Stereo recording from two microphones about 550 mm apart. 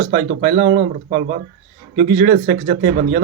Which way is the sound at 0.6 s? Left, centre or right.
Centre.